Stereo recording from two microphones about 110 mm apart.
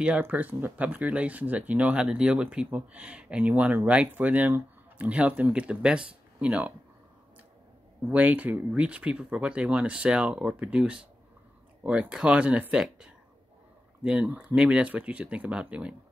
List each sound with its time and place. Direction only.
0.0 s speech: 15° right (ahead or behind)
8.1 s speech: 15° right (ahead or behind)